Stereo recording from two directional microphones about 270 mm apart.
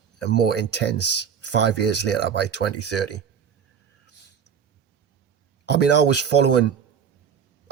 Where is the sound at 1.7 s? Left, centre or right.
Left.